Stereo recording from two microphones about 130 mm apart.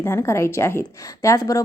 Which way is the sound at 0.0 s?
20° left (ahead or behind).